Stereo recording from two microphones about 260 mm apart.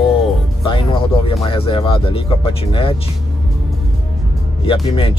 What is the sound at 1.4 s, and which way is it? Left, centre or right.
Speech, left.